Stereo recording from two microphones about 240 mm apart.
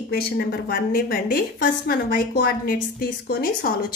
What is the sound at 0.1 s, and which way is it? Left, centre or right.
A woman's voice, left.